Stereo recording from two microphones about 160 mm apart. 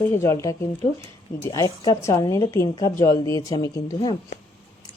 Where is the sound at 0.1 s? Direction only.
15° left (ahead or behind).